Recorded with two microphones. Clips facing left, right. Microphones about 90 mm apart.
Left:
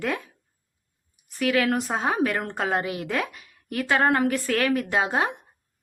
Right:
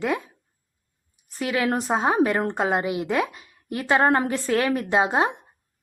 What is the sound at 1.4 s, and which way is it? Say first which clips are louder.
A woman's voice: left 1 dB; 25° right (ahead or behind).